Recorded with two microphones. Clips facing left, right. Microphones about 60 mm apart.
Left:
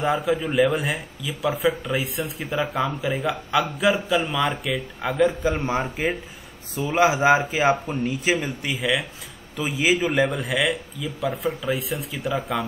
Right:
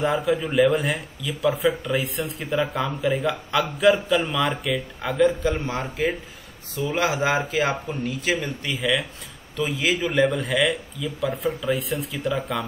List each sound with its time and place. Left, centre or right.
0.0 s a man's voice: centre
5.6 s speech: left
8.7 s a man's voice: centre